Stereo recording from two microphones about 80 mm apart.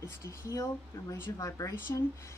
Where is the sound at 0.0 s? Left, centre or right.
Left.